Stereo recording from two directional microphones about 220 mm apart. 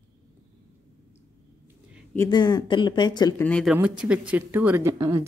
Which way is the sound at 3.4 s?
5° left (ahead or behind).